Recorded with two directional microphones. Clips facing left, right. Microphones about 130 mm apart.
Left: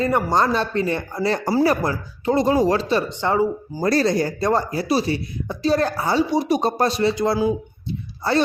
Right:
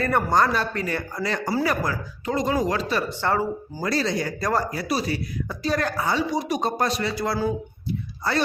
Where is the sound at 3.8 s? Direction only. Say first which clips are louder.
Left 6 dB; 45° left (ahead or behind); by 8.4 s 25° left (ahead or behind).